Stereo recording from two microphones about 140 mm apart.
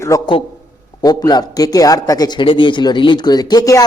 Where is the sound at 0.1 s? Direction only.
25° left (ahead or behind).